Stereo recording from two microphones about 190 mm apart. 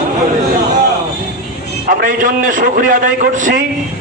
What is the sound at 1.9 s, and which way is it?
A man's voice, 45° right (ahead or behind).